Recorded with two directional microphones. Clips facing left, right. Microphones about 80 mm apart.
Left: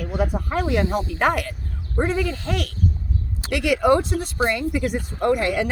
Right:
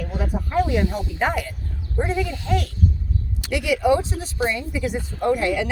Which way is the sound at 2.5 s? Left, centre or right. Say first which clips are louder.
Right 2 dB; left.